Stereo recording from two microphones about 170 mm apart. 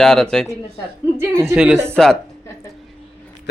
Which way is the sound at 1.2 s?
15° right (ahead or behind).